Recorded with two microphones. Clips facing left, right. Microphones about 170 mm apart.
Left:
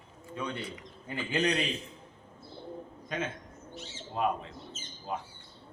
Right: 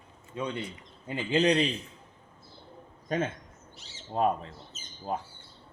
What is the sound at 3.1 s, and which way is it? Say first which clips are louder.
A man's voice: right 5 dB; 40° right (ahead or behind).